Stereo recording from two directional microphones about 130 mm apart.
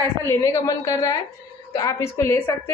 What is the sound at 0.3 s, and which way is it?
A woman's voice, 20° left (ahead or behind).